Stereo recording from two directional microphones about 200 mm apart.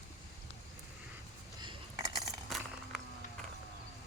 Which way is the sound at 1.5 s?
20° right (ahead or behind).